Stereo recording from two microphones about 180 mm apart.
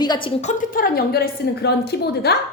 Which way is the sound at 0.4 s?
50° left (ahead or behind).